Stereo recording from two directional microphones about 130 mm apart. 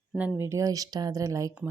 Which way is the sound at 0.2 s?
15° right (ahead or behind).